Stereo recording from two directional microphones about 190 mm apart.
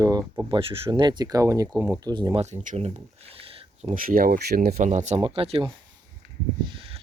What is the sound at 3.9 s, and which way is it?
Speech, 50° right (ahead or behind).